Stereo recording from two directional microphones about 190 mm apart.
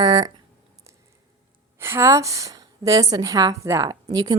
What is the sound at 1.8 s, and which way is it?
A woman's voice, 15° right (ahead or behind).